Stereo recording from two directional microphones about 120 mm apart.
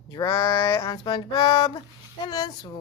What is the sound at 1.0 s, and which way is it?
Speech, 40° left (ahead or behind).